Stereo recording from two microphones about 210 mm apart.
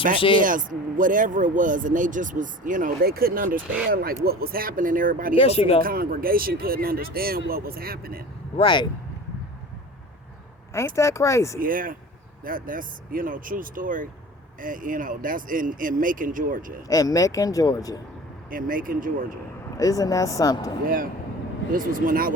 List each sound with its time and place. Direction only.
0.2 s speech: 25° left (ahead or behind)
0.4 s speech: 40° right (ahead or behind)
5.3 s speech: 25° left (ahead or behind)
5.8 s speech: 45° right (ahead or behind)
8.5 s speech: 20° left (ahead or behind)
10.8 s speech: 15° left (ahead or behind)
11.6 s speech: 40° right (ahead or behind)
16.9 s speech: 15° left (ahead or behind)
18.5 s speech: 40° right (ahead or behind)
19.7 s speech: 15° left (ahead or behind)
20.8 s speech: 40° right (ahead or behind)